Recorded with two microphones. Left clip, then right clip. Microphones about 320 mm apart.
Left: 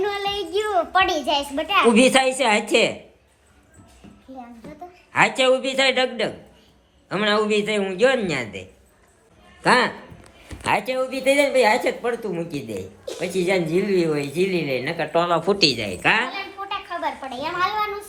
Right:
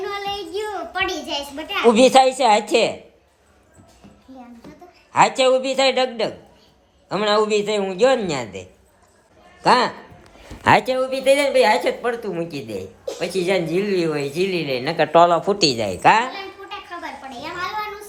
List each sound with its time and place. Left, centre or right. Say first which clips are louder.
0.0 s a sound: left 2 dB; centre
1.9 s a man's voice: right 7 dB; centre
5.1 s a man's voice: right 2 dB; centre
9.6 s a man's voice: right 2 dB; centre
10.5 s speech: right 6 dB; right
10.9 s a woman's voice: right 2 dB; centre
14.9 s speech: right 10 dB; right
15.3 s a man's voice: right 1 dB; centre
16.6 s a sound: left 5 dB; centre